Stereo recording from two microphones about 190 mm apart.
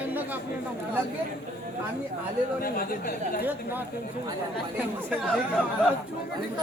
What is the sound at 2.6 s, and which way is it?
Speech, 50° left (ahead or behind).